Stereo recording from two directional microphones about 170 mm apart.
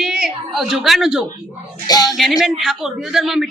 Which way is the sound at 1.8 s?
20° left (ahead or behind).